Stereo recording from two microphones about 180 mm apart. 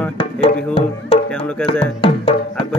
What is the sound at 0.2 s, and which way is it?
Music, 30° left (ahead or behind).